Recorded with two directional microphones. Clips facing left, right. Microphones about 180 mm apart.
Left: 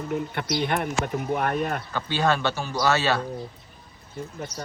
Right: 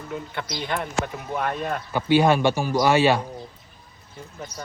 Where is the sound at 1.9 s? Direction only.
15° right (ahead or behind).